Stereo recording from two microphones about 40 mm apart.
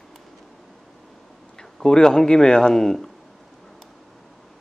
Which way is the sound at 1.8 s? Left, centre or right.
Centre.